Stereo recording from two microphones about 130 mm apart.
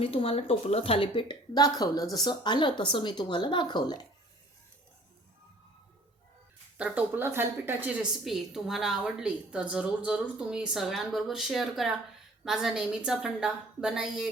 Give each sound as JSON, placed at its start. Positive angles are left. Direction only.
{"t": 0.0, "sound": "speech", "side_deg": 45}
{"t": 6.7, "sound": "a woman's voice", "side_deg": -10}
{"t": 8.2, "sound": "a woman's voice", "side_deg": 0}